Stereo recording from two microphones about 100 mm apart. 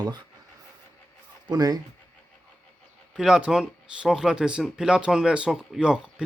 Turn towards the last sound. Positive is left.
turn(degrees=-10)  # may be behind; listen again after turning